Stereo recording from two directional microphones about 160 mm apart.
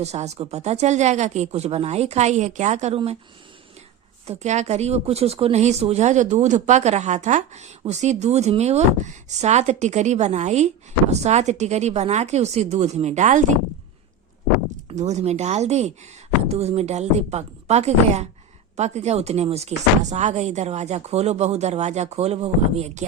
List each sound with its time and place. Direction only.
0.0 s speech: 45° right (ahead or behind)
4.3 s speech: 45° right (ahead or behind)
14.8 s speech: 45° right (ahead or behind)